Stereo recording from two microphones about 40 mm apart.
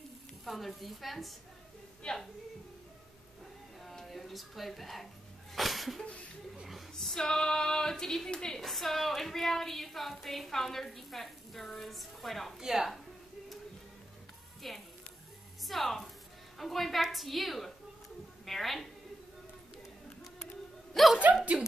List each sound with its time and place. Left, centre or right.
0.5 s a woman's voice: centre
2.0 s a woman's voice: left
3.8 s a sound: centre
6.7 s female singing: centre
8.5 s a woman's voice: centre
12.5 s a woman's voice: centre
14.6 s a woman's voice: centre
21.0 s a sound: centre